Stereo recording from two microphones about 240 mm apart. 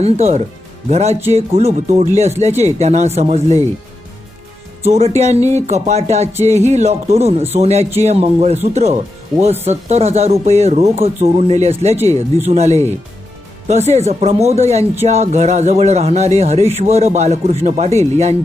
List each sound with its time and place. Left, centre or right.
0.0 s speech: right
4.8 s speech: right